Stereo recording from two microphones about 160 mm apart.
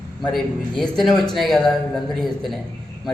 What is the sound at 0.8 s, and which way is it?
A man's voice, centre (ahead or behind).